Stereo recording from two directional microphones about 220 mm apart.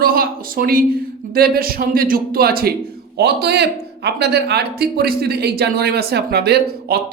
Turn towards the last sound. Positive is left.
turn(degrees=-45)  # may be behind; listen again after turning